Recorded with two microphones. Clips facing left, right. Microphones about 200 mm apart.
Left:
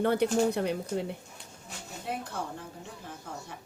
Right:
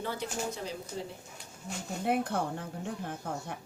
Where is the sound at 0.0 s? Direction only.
65° left (ahead or behind).